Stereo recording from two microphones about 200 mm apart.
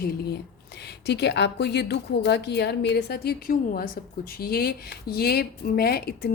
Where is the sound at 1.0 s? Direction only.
55° left (ahead or behind).